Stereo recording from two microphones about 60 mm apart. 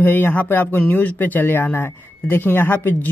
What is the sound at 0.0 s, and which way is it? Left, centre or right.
Speech, left.